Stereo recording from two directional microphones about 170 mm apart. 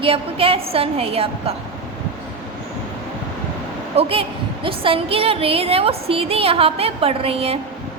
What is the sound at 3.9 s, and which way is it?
A woman's voice, 35° right (ahead or behind).